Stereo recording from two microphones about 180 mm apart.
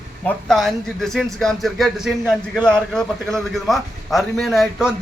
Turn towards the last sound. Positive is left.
turn(degrees=0)  # may be behind; listen again after turning